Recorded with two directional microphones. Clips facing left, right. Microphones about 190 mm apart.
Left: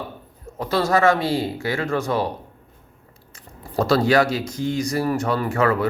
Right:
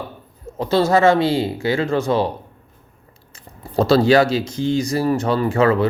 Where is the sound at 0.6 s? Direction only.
25° right (ahead or behind).